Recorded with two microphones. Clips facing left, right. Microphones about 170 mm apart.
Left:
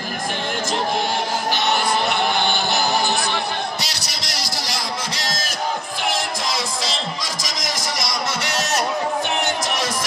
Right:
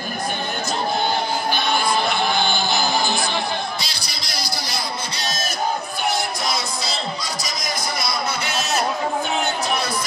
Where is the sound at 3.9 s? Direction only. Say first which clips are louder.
Left 1 dB; 80° left.